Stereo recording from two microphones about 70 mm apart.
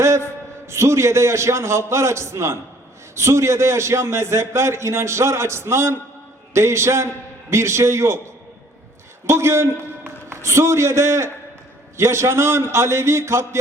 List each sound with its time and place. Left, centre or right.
0.7 s a man's voice: right
9.2 s a man's voice: right